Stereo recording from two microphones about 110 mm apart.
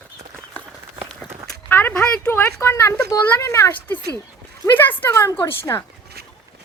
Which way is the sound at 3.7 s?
15° left (ahead or behind).